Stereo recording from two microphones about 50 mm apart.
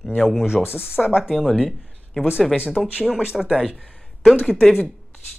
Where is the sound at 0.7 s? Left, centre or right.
Right.